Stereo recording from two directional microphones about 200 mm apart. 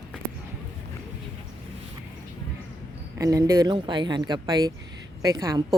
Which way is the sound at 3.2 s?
15° right (ahead or behind).